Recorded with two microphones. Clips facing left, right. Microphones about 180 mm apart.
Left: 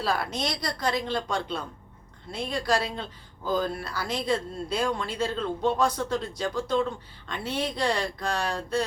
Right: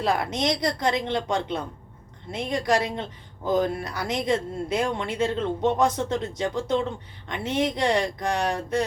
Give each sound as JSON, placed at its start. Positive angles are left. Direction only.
{"t": 0.0, "sound": "speech", "side_deg": -20}